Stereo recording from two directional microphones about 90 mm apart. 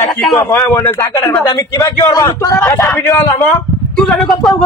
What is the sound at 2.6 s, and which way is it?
Speech, 25° left (ahead or behind).